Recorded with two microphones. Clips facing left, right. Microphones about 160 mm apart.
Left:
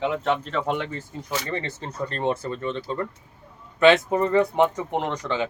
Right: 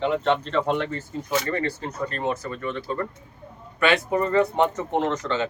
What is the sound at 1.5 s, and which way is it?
Speech, 25° left (ahead or behind).